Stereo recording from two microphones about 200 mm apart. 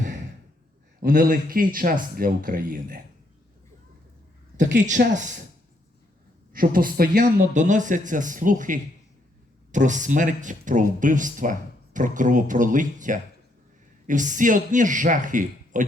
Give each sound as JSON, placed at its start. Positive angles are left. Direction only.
{"t": 1.0, "sound": "speech", "side_deg": -45}
{"t": 4.8, "sound": "a man's voice", "side_deg": -40}
{"t": 6.5, "sound": "a man's voice", "side_deg": -45}